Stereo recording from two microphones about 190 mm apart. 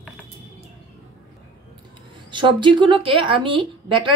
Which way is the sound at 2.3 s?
25° right (ahead or behind).